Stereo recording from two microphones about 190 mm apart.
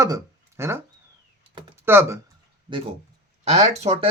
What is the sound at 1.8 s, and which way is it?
Speech, 15° right (ahead or behind).